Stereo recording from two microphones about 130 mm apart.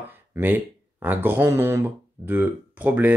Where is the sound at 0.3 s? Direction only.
25° right (ahead or behind).